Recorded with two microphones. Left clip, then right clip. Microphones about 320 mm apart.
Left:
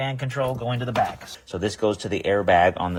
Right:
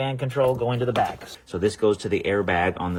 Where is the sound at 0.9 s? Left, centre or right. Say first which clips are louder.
Even; centre.